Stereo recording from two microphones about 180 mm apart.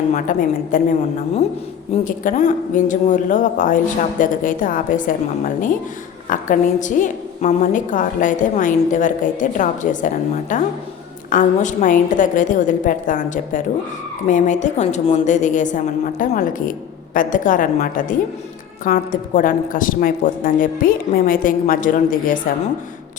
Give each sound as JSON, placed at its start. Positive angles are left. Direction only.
{"t": 0.1, "sound": "a woman's voice", "side_deg": 50}
{"t": 2.0, "sound": "a woman's voice", "side_deg": 45}